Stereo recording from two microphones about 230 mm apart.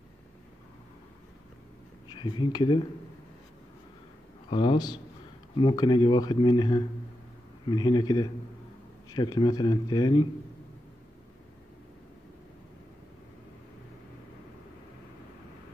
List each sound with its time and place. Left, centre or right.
2.0 s speech: centre
4.5 s speech: left